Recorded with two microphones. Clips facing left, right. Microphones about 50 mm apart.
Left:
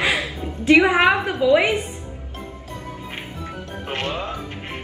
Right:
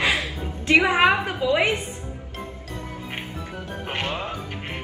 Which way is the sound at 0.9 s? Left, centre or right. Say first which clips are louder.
Left 2 dB; centre.